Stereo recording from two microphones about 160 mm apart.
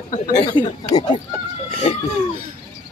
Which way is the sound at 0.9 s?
25° left (ahead or behind).